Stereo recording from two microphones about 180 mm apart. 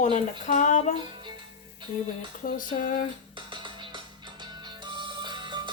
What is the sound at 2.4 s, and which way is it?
Speech, 50° left (ahead or behind).